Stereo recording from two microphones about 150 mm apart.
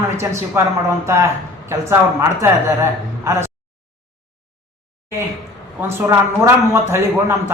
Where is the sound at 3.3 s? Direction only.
20° right (ahead or behind).